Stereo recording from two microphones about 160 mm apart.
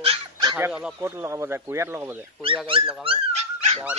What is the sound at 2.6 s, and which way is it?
Dog, 35° right (ahead or behind).